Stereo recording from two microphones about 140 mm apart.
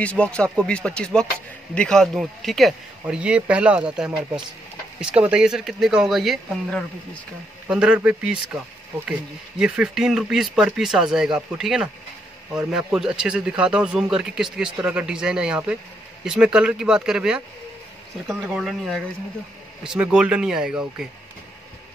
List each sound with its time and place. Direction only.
0.0 s speech: 10° left (ahead or behind)
18.5 s speech: centre (ahead or behind)